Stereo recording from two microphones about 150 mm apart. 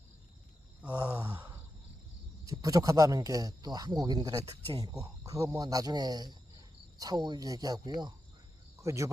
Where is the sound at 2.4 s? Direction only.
25° right (ahead or behind).